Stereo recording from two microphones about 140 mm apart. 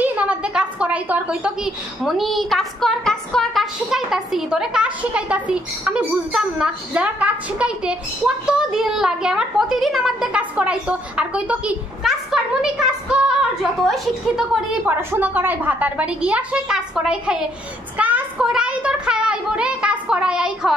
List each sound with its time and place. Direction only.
0.0 s a woman's voice: 10° right (ahead or behind)